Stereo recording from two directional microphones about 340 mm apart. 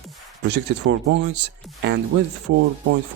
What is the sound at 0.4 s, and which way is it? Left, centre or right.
Speech, right.